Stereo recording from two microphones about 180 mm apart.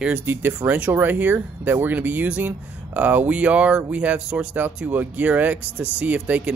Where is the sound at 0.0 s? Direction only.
10° right (ahead or behind).